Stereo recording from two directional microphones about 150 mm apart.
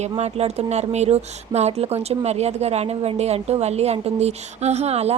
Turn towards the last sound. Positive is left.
turn(degrees=-45)  # may be behind; listen again after turning